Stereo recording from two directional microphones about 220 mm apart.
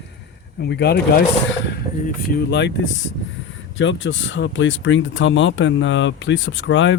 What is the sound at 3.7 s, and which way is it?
Speech, 60° left (ahead or behind).